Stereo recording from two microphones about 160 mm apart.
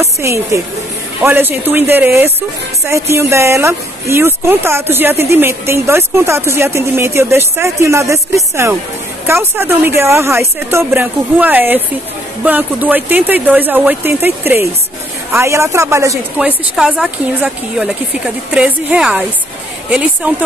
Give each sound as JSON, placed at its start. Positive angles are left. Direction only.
{"t": 0.0, "sound": "speech", "side_deg": -20}
{"t": 9.2, "sound": "speech", "side_deg": -15}
{"t": 16.3, "sound": "speech", "side_deg": -5}